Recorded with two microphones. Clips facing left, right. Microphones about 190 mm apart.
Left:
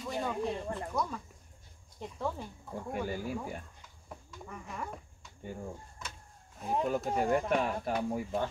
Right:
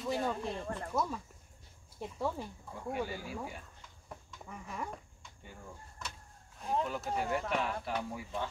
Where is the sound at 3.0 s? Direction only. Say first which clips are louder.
Left 5 dB; 45° left (ahead or behind).